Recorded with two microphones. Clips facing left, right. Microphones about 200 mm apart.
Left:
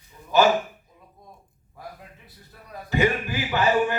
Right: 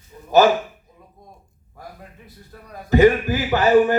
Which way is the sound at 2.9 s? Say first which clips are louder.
Right 9 dB; 45° right (ahead or behind).